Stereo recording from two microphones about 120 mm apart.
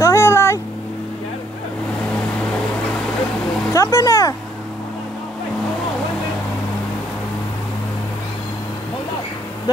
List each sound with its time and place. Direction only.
0.0 s vehicle: 20° left (ahead or behind)
3.7 s speech: 25° left (ahead or behind)